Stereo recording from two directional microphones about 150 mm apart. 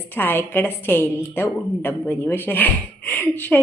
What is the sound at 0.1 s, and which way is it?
Speech, 15° left (ahead or behind).